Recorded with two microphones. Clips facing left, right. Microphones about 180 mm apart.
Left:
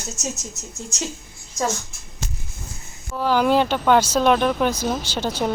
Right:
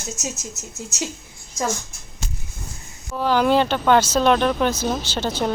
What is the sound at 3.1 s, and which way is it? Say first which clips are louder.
Speech: even; 5° left (ahead or behind).